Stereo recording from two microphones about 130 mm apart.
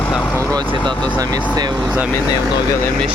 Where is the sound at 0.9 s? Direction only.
10° left (ahead or behind).